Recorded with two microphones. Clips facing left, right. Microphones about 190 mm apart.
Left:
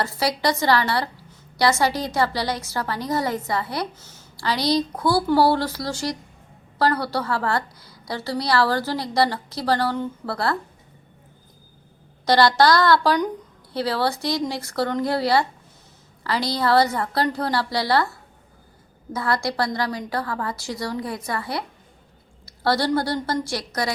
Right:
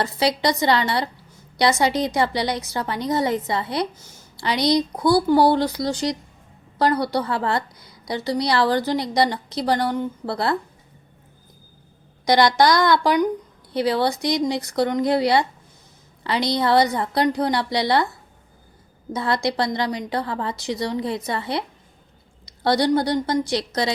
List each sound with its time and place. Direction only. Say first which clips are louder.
0.0 s a woman's voice: right 2 dB; 20° right (ahead or behind)
12.2 s a woman's voice: even; 15° right (ahead or behind)
19.1 s a woman's voice: right 2 dB; 20° right (ahead or behind)